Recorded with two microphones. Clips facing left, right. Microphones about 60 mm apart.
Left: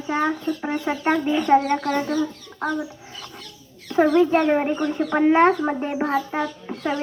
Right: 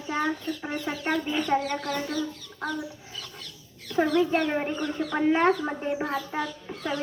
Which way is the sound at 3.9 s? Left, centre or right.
Left.